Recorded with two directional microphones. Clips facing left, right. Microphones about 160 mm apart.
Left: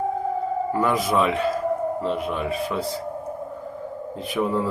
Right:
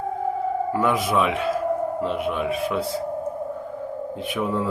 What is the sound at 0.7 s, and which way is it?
Speech, centre (ahead or behind).